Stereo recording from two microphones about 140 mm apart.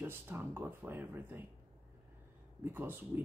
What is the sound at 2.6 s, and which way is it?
Speech, 15° right (ahead or behind).